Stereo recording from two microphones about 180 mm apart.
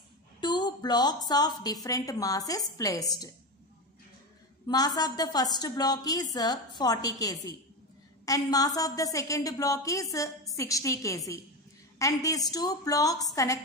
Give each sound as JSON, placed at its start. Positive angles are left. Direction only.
{"t": 0.4, "sound": "a woman's voice", "side_deg": 25}
{"t": 4.6, "sound": "a woman's voice", "side_deg": 20}